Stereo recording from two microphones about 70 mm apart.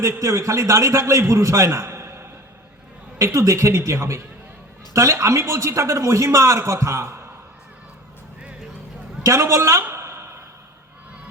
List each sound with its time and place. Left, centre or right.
0.2 s a man's voice: right
3.2 s a man's voice: right
9.2 s a man's voice: right
9.9 s a sound: right